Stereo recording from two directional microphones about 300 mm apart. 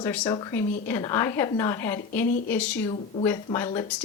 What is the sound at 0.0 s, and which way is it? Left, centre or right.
A woman's voice, centre.